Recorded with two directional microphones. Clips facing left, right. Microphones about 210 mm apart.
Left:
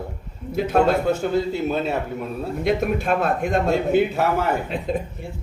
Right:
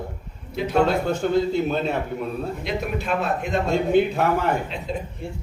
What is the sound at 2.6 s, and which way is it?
Speech, 50° left (ahead or behind).